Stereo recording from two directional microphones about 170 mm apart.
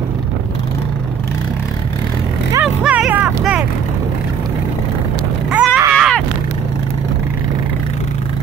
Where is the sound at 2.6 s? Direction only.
5° right (ahead or behind).